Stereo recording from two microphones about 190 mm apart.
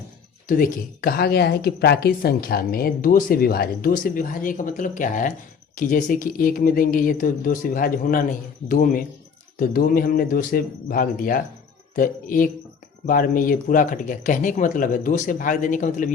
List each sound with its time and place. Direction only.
0.4 s speech: 50° left (ahead or behind)